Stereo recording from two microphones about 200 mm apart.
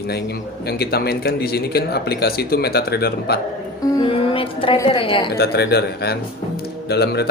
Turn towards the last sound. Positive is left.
turn(degrees=55)  # may be behind; listen again after turning